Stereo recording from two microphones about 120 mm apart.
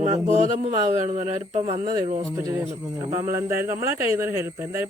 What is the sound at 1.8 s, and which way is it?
A man's voice, 35° right (ahead or behind).